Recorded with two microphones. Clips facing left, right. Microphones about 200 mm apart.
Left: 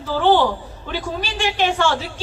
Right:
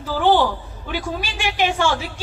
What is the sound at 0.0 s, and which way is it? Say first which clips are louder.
A woman's voice: left 1 dB; 10° right (ahead or behind).